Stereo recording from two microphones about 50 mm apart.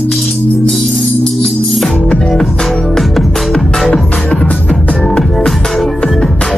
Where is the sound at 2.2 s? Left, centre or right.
Centre.